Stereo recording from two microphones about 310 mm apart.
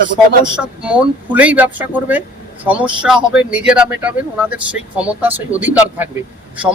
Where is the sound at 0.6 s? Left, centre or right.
Centre.